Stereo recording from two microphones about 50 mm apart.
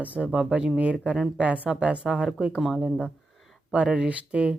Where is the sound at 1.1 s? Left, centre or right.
Centre.